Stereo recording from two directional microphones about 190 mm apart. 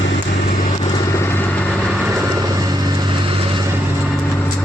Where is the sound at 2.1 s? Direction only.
15° right (ahead or behind).